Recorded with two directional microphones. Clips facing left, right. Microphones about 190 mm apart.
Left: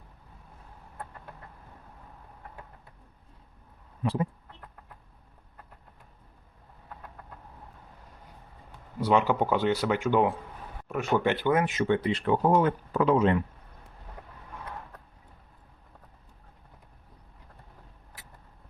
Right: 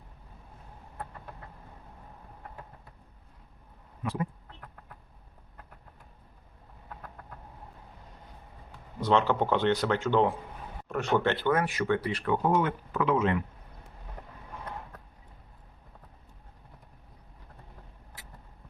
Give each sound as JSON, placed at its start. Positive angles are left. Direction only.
{"t": 4.0, "sound": "speech", "side_deg": 30}
{"t": 9.0, "sound": "speech", "side_deg": 10}